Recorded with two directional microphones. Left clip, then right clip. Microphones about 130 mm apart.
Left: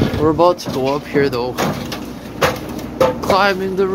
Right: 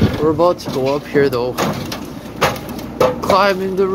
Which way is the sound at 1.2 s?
10° right (ahead or behind).